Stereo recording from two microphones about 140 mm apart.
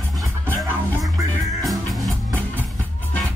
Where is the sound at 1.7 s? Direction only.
Centre (ahead or behind).